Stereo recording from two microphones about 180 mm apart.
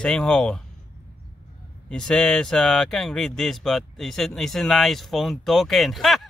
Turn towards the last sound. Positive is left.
turn(degrees=0)  # may be behind; listen again after turning